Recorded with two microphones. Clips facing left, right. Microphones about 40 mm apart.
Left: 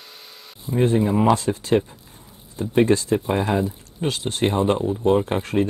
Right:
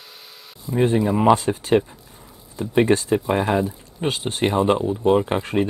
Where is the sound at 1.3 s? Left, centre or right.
Right.